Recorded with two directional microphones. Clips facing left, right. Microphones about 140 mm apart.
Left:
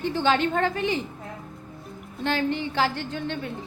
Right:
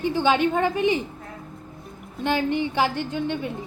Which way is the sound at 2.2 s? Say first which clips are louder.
Right 3 dB; 15° right (ahead or behind).